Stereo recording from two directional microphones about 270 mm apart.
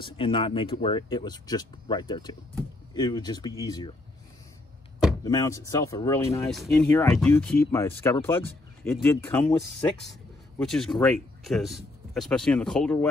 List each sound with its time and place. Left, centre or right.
0.0 s speech: centre
5.2 s speech: centre
10.6 s speech: centre